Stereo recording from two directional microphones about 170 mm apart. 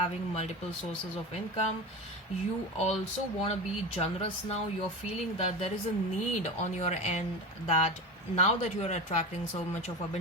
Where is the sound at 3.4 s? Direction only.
35° left (ahead or behind).